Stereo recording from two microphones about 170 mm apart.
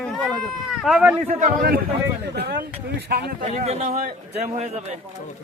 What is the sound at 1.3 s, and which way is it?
Speech, 55° right (ahead or behind).